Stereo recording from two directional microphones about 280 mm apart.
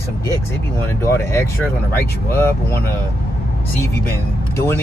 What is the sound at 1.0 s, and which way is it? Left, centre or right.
Speech, centre.